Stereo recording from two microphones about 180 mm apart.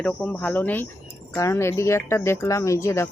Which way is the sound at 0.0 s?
10° left (ahead or behind).